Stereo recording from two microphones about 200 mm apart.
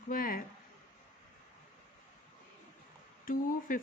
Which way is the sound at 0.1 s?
45° left (ahead or behind).